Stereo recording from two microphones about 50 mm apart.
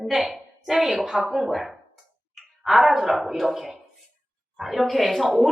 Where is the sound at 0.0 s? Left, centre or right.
Centre.